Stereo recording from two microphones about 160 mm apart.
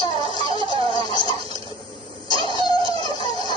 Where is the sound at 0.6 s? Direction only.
30° right (ahead or behind).